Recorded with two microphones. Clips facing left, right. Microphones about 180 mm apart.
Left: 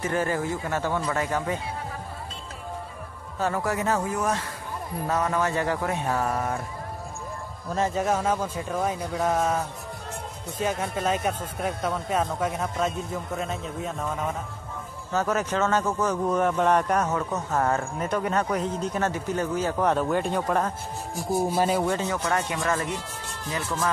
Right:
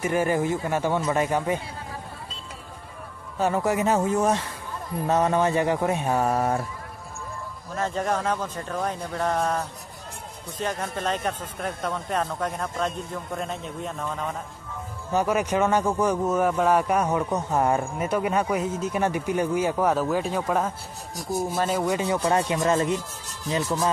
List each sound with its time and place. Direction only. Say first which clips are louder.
0.0 s a man's voice: right 3 dB; 15° right (ahead or behind)
3.3 s speech: right 3 dB; 20° right (ahead or behind)
7.9 s speech: right 1 dB; 5° left (ahead or behind)
10.6 s speech: left 2 dB; 10° left (ahead or behind)
15.1 s a man's voice: right 2 dB; 15° right (ahead or behind); by 21.8 s 5° left (ahead or behind)
21.8 s a man's voice: right 2 dB; 10° right (ahead or behind)
22.2 s speech: right 4 dB; 30° right (ahead or behind)